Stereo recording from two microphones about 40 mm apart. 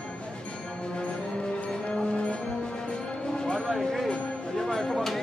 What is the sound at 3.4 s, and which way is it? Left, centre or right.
Music, centre.